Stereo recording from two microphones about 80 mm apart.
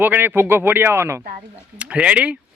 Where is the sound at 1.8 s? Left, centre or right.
Centre.